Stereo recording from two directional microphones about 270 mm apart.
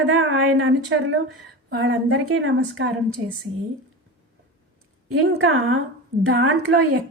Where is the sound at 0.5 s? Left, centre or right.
Right.